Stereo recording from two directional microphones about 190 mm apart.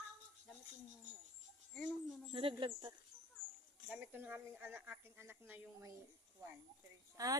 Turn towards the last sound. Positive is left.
turn(degrees=-20)  # may be behind; listen again after turning